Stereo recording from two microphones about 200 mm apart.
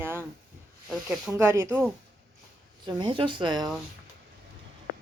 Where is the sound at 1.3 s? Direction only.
15° right (ahead or behind).